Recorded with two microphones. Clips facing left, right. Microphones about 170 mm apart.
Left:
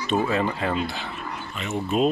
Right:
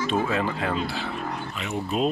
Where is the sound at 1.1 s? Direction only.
40° right (ahead or behind).